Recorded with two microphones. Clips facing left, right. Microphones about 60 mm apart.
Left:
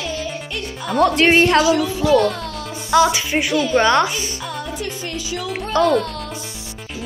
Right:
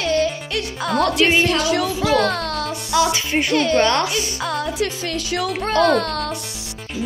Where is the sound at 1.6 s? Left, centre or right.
Right.